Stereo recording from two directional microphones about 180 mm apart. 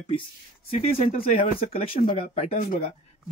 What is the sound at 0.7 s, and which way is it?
Speech, 35° left (ahead or behind).